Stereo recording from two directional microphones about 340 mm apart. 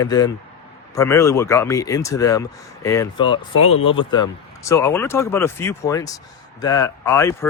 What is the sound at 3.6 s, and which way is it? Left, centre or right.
Speech, left.